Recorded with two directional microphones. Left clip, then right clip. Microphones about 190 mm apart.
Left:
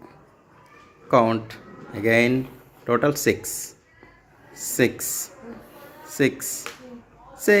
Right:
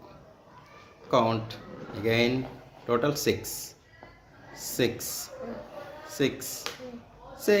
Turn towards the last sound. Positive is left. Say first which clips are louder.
# left 6 dB
turn(degrees=45)  # may be behind; listen again after turning